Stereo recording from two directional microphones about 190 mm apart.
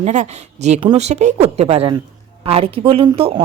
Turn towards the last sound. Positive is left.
turn(degrees=-25)  # may be behind; listen again after turning